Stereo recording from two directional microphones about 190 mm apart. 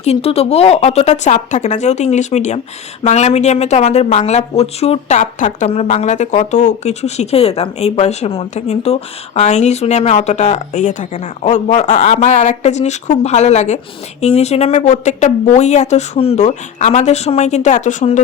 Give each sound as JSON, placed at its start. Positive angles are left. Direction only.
{"t": 0.0, "sound": "speech", "side_deg": 35}